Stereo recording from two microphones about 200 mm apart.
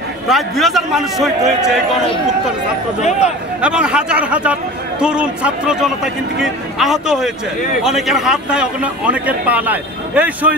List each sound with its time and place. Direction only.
0.3 s a man's voice: centre (ahead or behind)
3.0 s a man's voice: 35° left (ahead or behind)
3.6 s a man's voice: 5° right (ahead or behind)